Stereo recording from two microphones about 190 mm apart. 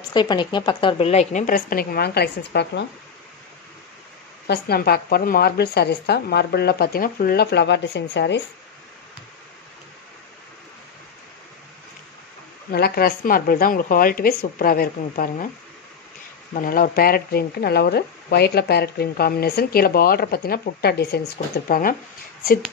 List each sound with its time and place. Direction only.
0.1 s a woman's voice: 25° left (ahead or behind); by 2.8 s 60° left (ahead or behind)
4.5 s a woman's voice: 55° left (ahead or behind)
12.7 s speech: 55° left (ahead or behind)
16.5 s speech: 45° left (ahead or behind)